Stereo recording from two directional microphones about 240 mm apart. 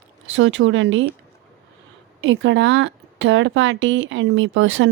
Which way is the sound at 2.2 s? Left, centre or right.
Right.